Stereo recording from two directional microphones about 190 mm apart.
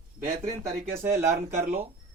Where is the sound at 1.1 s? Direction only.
35° right (ahead or behind).